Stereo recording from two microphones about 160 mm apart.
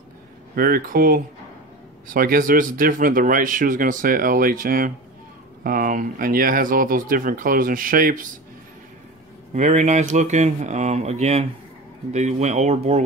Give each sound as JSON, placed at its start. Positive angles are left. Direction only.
{"t": 0.6, "sound": "speech", "side_deg": -65}
{"t": 9.5, "sound": "speech", "side_deg": -45}